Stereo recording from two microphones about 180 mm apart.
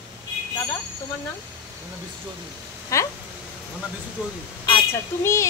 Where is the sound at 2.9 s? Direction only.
15° left (ahead or behind).